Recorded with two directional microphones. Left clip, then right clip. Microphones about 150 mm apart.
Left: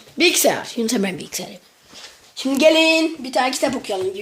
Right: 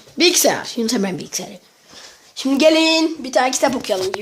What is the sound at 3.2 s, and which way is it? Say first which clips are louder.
Speech: right 3 dB; 10° right (ahead or behind).